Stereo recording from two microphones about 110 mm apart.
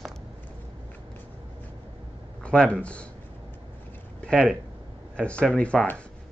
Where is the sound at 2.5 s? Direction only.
10° left (ahead or behind).